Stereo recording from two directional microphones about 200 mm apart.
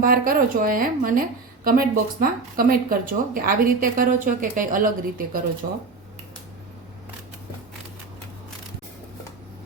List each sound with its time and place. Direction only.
0.0 s speech: 45° right (ahead or behind)